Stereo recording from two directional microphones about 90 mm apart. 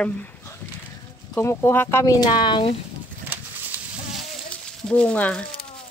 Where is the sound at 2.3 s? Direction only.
60° left (ahead or behind).